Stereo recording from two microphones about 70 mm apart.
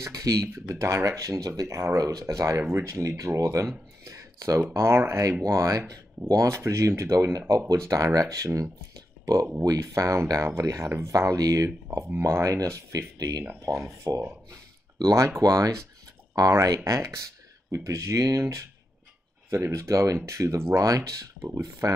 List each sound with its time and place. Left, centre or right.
0.0 s speech: right
0.5 s speech: right
2.6 s speech: right
4.0 s a sound: right
4.7 s speech: right
5.4 s speech: right
12.9 s speech: right
19.7 s speech: right